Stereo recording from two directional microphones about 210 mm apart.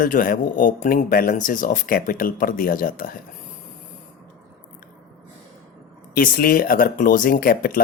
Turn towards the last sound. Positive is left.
turn(degrees=45)  # may be behind; listen again after turning